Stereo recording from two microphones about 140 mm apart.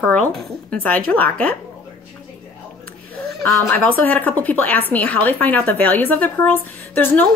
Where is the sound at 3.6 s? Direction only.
10° left (ahead or behind).